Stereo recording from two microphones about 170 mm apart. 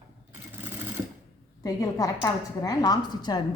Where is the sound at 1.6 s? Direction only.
20° left (ahead or behind).